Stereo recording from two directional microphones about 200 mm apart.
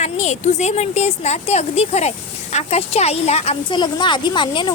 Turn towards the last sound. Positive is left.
turn(degrees=25)  # may be behind; listen again after turning